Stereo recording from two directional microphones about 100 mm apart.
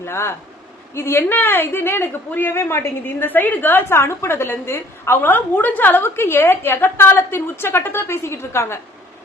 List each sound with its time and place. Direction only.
0.0 s a woman's voice: 25° left (ahead or behind)